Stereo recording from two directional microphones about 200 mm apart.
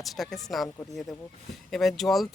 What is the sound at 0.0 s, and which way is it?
Speech, centre (ahead or behind).